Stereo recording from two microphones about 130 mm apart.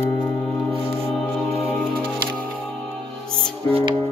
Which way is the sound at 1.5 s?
45° right (ahead or behind).